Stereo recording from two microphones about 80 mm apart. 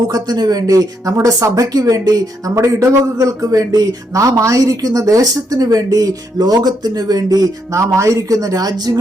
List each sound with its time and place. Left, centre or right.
0.1 s a man's voice: right